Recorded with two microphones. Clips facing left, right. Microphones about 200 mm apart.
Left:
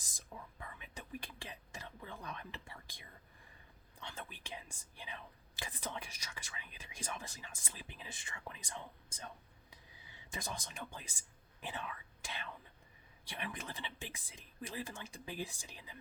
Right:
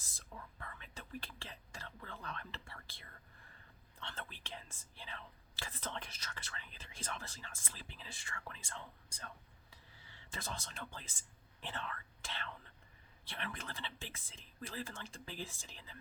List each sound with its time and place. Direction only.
0.0 s whispering: 15° left (ahead or behind)
4.0 s speech: 10° left (ahead or behind)